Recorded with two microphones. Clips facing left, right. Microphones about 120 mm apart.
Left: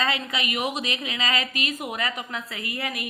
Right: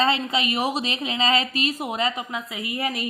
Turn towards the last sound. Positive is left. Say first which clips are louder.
# right 4 dB
turn(degrees=-25)  # may be behind; listen again after turning